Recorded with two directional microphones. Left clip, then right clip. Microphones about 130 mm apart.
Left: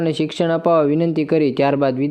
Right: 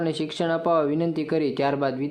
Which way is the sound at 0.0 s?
45° left (ahead or behind).